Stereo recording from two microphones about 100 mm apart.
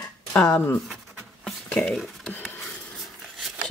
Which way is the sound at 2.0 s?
Centre (ahead or behind).